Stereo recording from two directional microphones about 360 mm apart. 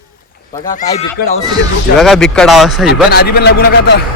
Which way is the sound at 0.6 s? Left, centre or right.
Left.